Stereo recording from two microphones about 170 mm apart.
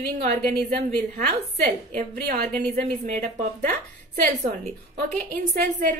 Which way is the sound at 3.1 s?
45° right (ahead or behind).